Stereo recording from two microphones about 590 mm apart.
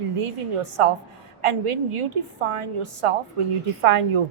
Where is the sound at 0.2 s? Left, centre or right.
Right.